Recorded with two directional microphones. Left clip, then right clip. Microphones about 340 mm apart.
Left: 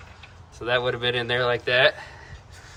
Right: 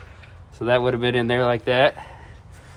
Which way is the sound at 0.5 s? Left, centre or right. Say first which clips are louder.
Right 4 dB; centre.